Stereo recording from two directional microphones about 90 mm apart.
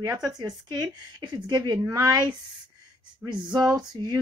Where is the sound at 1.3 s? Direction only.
55° right (ahead or behind).